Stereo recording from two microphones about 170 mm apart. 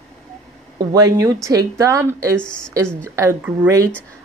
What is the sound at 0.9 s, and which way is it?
A woman's voice, 20° right (ahead or behind).